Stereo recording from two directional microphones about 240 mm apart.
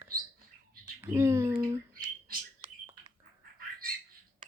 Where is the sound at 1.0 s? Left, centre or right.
Centre.